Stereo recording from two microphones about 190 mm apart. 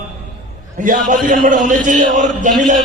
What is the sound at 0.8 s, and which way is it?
A man's voice, 45° right (ahead or behind).